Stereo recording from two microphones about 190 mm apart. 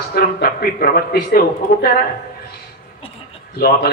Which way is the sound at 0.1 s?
55° left (ahead or behind).